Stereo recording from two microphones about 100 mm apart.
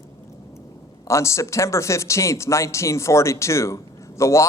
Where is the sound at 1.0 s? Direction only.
30° left (ahead or behind).